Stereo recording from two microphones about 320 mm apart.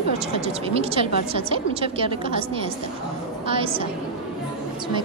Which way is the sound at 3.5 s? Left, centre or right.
Centre.